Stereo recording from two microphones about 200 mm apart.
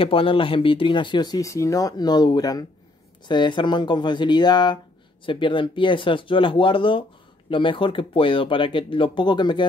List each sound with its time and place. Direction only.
0.0 s speech: 25° left (ahead or behind)